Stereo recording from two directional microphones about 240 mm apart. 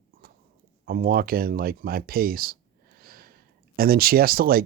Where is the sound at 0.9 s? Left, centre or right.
Right.